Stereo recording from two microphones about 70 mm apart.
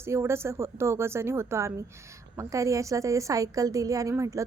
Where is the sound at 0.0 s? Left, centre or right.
Right.